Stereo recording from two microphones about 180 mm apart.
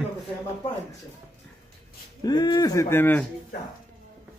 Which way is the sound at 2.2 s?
25° left (ahead or behind).